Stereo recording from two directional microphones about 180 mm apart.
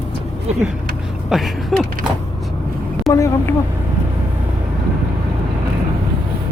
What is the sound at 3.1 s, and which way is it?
Speech, 15° left (ahead or behind).